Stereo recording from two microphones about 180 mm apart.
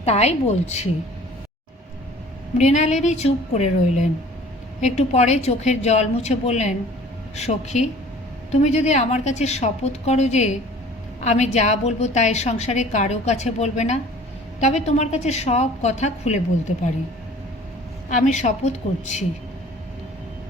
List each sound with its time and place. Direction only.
0.0 s a woman's voice: 35° left (ahead or behind)
2.6 s a woman's voice: 40° left (ahead or behind)
18.2 s a woman's voice: 40° left (ahead or behind)